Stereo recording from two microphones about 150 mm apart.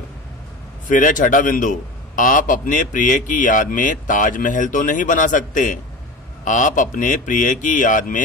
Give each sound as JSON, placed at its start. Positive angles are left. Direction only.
{"t": 0.8, "sound": "a man's voice", "side_deg": 60}